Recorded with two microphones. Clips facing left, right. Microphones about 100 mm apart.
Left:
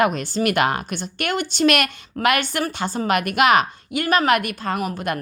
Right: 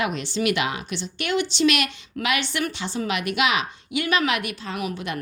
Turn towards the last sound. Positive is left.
turn(degrees=45)  # may be behind; listen again after turning